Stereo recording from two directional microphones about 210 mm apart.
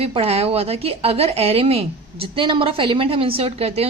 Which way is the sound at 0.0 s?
30° right (ahead or behind).